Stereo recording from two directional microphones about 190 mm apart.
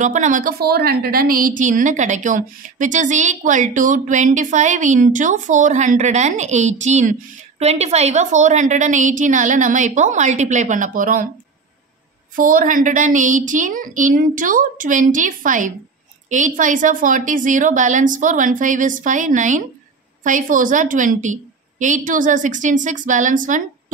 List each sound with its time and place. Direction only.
0.0 s a woman's voice: 40° right (ahead or behind)
12.4 s a woman's voice: 45° right (ahead or behind)